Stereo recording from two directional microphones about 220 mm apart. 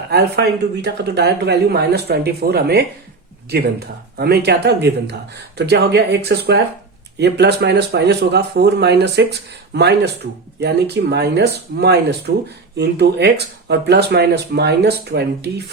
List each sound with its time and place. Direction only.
0.1 s speech: 50° right (ahead or behind)